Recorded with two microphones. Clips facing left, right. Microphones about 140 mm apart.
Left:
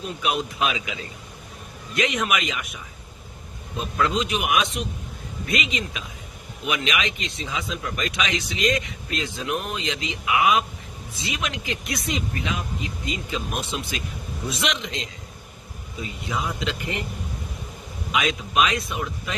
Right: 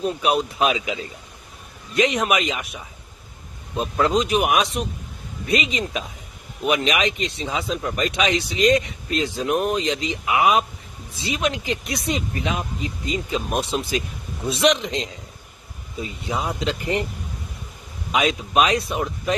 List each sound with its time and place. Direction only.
0.0 s speech: 40° right (ahead or behind)
2.0 s speech: 35° right (ahead or behind)
18.1 s speech: 35° right (ahead or behind)